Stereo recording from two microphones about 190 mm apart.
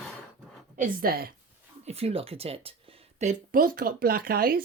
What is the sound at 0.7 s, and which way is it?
Speech, 45° right (ahead or behind).